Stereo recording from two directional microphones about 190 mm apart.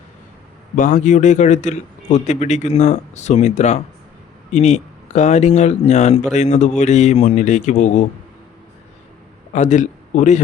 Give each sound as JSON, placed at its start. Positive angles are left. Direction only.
{"t": 0.8, "sound": "a man's voice", "side_deg": 40}
{"t": 9.5, "sound": "a man's voice", "side_deg": 40}